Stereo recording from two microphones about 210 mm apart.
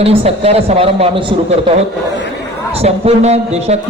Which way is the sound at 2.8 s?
30° right (ahead or behind).